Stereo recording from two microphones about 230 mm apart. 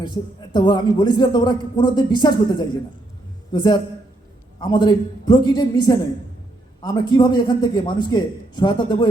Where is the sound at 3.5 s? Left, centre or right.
Centre.